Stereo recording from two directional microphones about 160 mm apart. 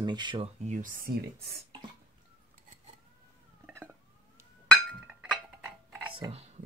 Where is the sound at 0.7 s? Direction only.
55° right (ahead or behind); by 1.6 s 75° right (ahead or behind).